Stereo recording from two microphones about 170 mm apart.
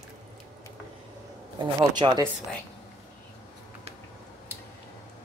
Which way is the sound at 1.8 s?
25° right (ahead or behind).